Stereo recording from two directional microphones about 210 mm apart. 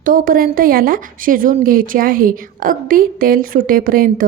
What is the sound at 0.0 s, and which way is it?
Speech, 40° right (ahead or behind).